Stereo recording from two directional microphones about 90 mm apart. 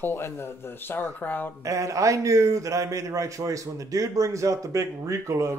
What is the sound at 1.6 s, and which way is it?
A man's voice, 35° right (ahead or behind).